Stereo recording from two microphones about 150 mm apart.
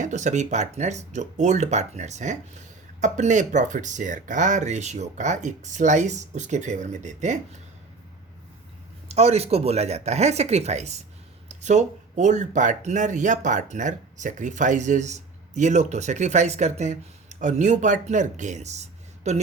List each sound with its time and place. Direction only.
0.0 s speech: 55° right (ahead or behind)
9.0 s speech: 45° right (ahead or behind)